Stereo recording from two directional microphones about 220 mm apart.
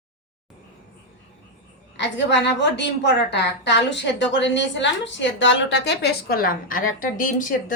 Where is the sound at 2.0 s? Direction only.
55° left (ahead or behind).